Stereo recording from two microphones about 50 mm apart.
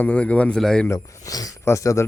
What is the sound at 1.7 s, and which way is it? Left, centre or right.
Speech, left.